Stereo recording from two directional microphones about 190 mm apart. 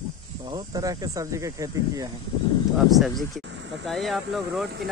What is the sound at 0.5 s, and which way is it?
Speech, 20° right (ahead or behind).